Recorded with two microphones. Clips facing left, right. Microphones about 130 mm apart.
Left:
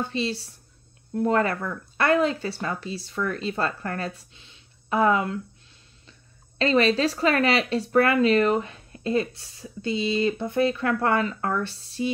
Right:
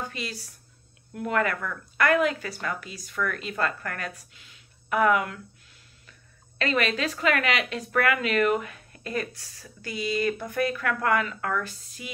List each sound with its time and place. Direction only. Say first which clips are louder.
0.0 s speech: left 7 dB; 30° left (ahead or behind)
6.6 s speech: left 6 dB; 30° left (ahead or behind)